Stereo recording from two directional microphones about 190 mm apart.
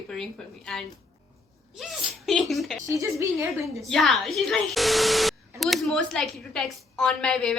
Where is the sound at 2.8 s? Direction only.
15° right (ahead or behind).